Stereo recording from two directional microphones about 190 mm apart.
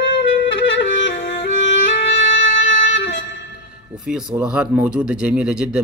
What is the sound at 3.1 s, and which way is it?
Music, 70° left (ahead or behind).